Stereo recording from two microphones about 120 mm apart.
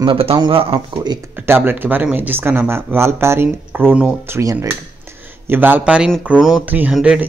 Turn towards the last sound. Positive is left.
turn(degrees=-10)  # may be behind; listen again after turning